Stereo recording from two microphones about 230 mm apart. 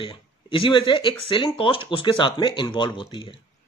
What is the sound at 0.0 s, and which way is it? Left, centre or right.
A man's voice, left.